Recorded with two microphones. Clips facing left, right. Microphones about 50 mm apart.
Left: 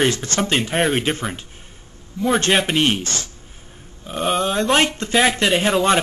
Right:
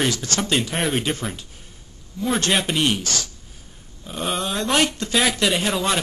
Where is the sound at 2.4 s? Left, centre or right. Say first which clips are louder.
Left 1 dB; left.